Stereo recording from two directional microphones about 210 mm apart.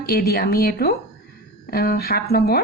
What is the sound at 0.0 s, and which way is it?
Speech, 45° left (ahead or behind).